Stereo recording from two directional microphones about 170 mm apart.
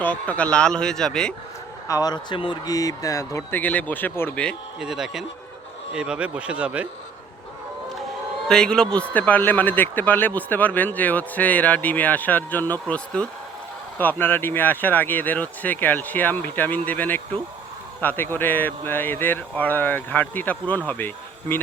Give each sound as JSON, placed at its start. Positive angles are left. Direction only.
{"t": 0.0, "sound": "speech", "side_deg": 10}
{"t": 1.9, "sound": "a man's voice", "side_deg": 20}
{"t": 4.8, "sound": "speech", "side_deg": -5}
{"t": 8.4, "sound": "a man's voice", "side_deg": 5}